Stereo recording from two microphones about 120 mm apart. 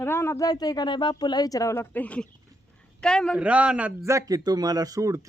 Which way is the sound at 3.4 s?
10° right (ahead or behind).